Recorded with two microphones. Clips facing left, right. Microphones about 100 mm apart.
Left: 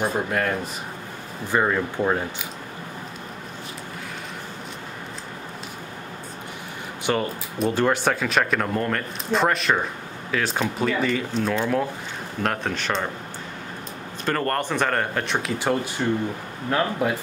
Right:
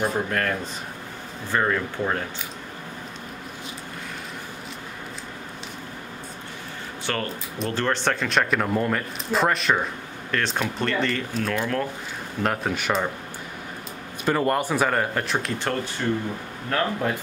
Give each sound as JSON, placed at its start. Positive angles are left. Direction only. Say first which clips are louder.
{"t": 0.0, "sound": "speech", "louder": "left 1 dB", "side_deg": 10}
{"t": 7.1, "sound": "speech", "louder": "left 5 dB", "side_deg": 15}
{"t": 12.4, "sound": "speech", "louder": "right 1 dB", "side_deg": -5}
{"t": 14.2, "sound": "speech", "louder": "right 2 dB", "side_deg": -10}
{"t": 16.0, "sound": "speech", "louder": "left 2 dB", "side_deg": 15}